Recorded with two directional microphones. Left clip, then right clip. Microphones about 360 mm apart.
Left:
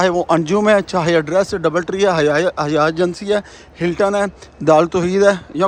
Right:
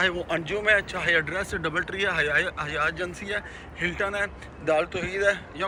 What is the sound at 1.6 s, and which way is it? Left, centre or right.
Speech, centre.